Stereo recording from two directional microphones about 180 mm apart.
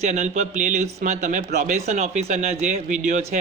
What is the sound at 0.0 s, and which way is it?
A man's voice, 40° right (ahead or behind).